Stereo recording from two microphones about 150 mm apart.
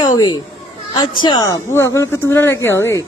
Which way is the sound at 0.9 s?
30° left (ahead or behind).